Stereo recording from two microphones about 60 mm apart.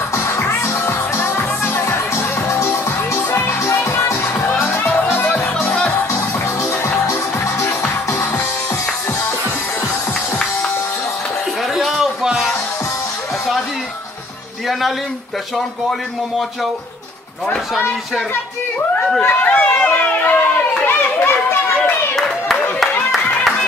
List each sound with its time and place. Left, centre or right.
0.1 s music: left
5.3 s music: left
11.7 s a sound: centre
19.2 s run: left
22.1 s clapping: centre